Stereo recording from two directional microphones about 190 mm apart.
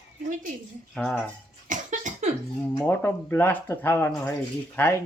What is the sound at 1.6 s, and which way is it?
Cough, 40° right (ahead or behind).